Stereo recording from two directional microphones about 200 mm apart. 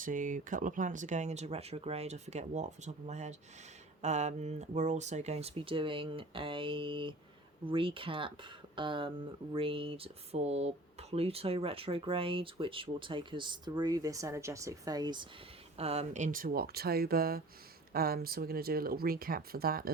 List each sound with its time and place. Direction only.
0.0 s speech: 40° right (ahead or behind); by 15.3 s 20° right (ahead or behind)
15.8 s speech: 30° right (ahead or behind); by 19.9 s 50° right (ahead or behind)